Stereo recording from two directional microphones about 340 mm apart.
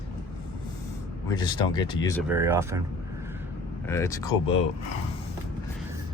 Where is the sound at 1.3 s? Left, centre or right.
Centre.